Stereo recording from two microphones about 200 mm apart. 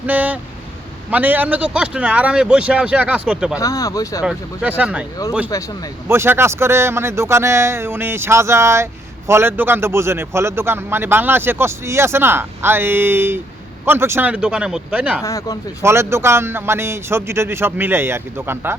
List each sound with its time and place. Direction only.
0.0 s speech: 10° right (ahead or behind)
3.6 s speech: 15° left (ahead or behind)
4.2 s speech: 5° right (ahead or behind)
6.1 s speech: 10° right (ahead or behind)
15.2 s speech: 15° left (ahead or behind)
15.8 s speech: 15° right (ahead or behind)